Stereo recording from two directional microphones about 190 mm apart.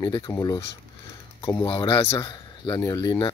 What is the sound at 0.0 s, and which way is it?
Speech, 20° left (ahead or behind).